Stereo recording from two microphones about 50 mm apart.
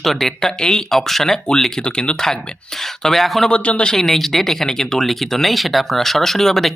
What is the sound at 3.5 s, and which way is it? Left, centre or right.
Speech, left.